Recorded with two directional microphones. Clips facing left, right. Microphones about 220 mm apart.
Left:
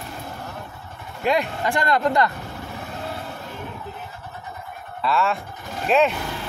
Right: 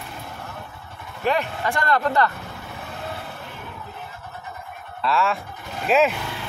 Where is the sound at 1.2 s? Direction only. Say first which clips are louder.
Left 1 dB; 15° left (ahead or behind).